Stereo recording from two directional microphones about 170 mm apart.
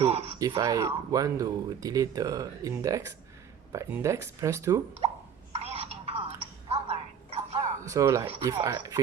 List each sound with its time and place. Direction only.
0.0 s speech: 35° right (ahead or behind)
0.6 s speech: 20° right (ahead or behind)
5.5 s telephone: 35° right (ahead or behind)
6.7 s music: 35° right (ahead or behind)
7.8 s speech: 15° right (ahead or behind)